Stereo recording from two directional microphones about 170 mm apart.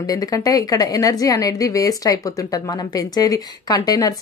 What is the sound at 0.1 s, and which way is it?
A woman's voice, 20° left (ahead or behind).